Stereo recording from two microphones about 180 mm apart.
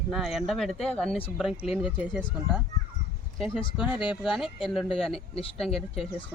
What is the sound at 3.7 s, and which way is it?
Speech, 5° right (ahead or behind).